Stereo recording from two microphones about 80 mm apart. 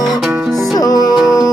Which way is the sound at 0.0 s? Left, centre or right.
Centre.